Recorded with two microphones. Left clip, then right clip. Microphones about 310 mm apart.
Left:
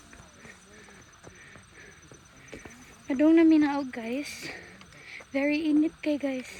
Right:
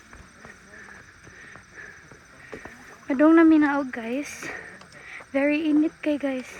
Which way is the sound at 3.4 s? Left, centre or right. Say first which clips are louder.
Right 4 dB; centre.